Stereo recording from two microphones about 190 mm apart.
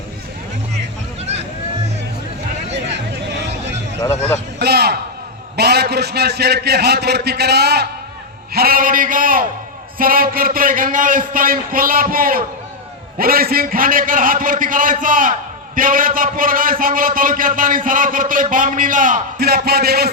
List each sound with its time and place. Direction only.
1.2 s vehicle: 35° right (ahead or behind)
2.7 s a sound: 65° right (ahead or behind)
4.0 s a man's voice: 15° left (ahead or behind)
4.6 s a man's voice: 55° right (ahead or behind)